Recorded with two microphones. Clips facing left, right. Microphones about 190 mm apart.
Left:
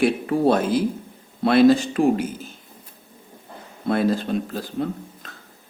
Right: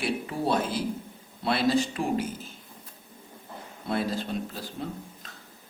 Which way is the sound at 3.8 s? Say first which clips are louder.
Left 8 dB; 60° left (ahead or behind).